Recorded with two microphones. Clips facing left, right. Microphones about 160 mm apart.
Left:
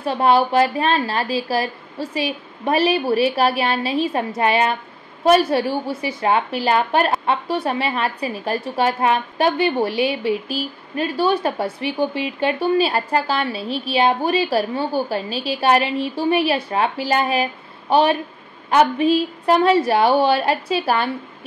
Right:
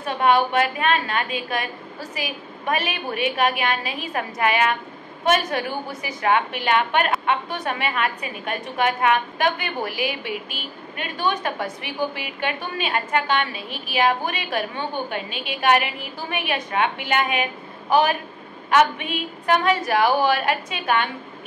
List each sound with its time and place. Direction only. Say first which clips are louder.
0.0 s a woman's voice: left 3 dB; 30° left (ahead or behind)